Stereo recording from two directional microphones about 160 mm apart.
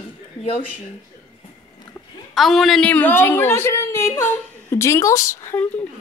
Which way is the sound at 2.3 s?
Centre (ahead or behind).